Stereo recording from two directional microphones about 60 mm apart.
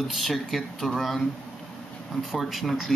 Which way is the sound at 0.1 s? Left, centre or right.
Centre.